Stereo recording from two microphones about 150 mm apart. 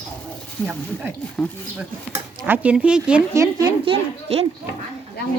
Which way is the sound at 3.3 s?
25° right (ahead or behind).